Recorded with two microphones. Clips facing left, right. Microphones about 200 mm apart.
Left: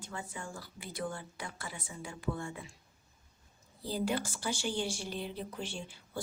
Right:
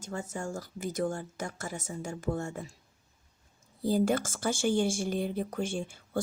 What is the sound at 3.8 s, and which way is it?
Speech, 50° right (ahead or behind).